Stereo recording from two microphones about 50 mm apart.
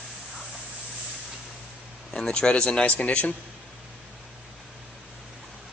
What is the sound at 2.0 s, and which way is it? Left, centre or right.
A man's voice, centre.